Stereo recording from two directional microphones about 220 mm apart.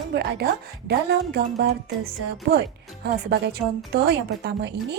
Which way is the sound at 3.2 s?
45° right (ahead or behind).